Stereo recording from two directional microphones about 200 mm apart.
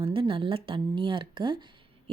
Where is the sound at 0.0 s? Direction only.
30° right (ahead or behind).